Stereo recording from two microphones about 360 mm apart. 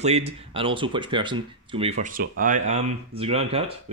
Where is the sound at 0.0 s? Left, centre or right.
Centre.